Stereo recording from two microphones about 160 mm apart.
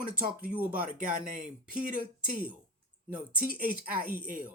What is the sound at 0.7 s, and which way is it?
Speech, 65° right (ahead or behind).